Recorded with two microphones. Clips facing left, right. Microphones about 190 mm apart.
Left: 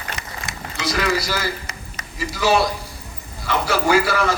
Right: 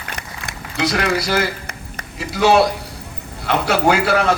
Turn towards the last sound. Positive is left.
turn(degrees=-60)  # may be behind; listen again after turning